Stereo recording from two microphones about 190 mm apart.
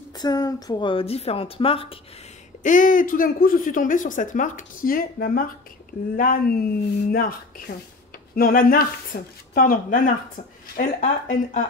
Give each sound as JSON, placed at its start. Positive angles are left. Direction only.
{"t": 0.2, "sound": "a woman's voice", "side_deg": 20}
{"t": 2.6, "sound": "a woman's voice", "side_deg": 45}